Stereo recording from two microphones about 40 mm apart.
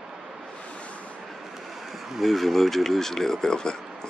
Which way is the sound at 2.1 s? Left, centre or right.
Centre.